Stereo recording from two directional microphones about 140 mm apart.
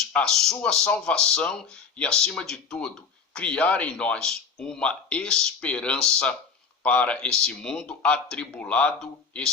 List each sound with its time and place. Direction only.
0.0 s speech: 5° left (ahead or behind)